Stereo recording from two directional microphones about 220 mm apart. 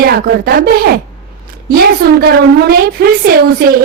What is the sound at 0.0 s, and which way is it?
A woman's voice, 45° right (ahead or behind).